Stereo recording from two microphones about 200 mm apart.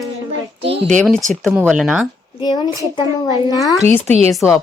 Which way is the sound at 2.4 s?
20° left (ahead or behind).